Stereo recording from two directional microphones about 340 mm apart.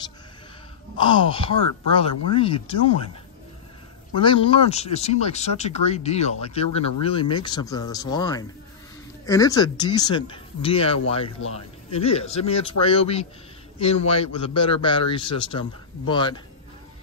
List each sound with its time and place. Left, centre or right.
0.9 s speech: centre
4.1 s speech: centre